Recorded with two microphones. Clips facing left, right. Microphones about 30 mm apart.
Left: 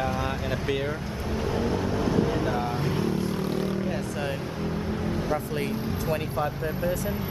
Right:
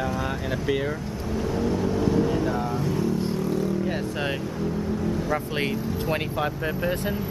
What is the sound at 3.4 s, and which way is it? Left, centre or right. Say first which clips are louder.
Vehicle: right 2 dB; left.